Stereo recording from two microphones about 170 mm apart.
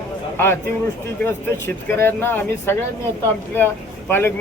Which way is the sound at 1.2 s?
15° left (ahead or behind).